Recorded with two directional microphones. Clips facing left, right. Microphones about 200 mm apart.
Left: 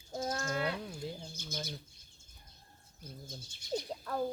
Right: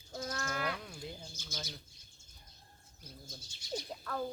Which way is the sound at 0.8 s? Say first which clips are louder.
Left 4 dB; 20° left (ahead or behind).